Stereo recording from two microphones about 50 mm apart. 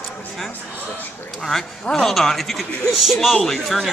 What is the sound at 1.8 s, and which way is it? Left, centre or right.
A man's voice, centre.